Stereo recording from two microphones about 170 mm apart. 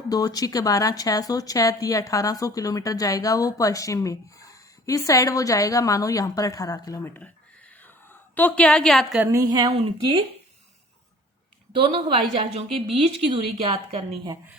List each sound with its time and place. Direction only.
0.1 s speech: 20° left (ahead or behind); by 9.2 s centre (ahead or behind)
9.2 s speech: 20° right (ahead or behind)
11.7 s a woman's voice: 30° right (ahead or behind)
13.3 s speech: 25° right (ahead or behind)